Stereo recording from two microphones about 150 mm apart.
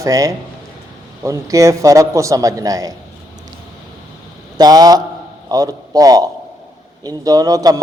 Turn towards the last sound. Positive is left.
turn(degrees=-25)  # may be behind; listen again after turning